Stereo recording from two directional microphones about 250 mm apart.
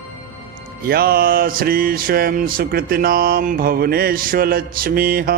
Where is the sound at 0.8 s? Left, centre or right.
Right.